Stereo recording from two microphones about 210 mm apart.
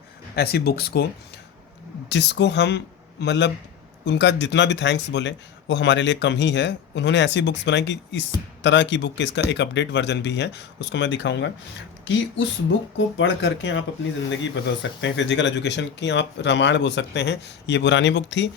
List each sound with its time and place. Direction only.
0.3 s speech: 50° left (ahead or behind)
2.0 s speech: 55° left (ahead or behind)
13.1 s speech: 60° left (ahead or behind)